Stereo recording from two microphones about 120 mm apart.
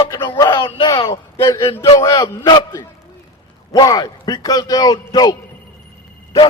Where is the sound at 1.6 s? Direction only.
25° left (ahead or behind).